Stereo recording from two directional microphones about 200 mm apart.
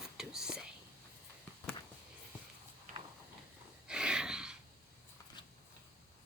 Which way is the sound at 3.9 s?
5° right (ahead or behind).